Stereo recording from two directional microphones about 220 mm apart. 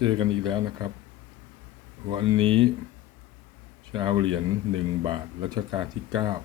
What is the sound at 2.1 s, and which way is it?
Speech, 20° right (ahead or behind).